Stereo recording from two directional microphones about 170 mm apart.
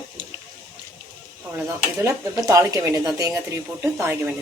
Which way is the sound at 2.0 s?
20° right (ahead or behind).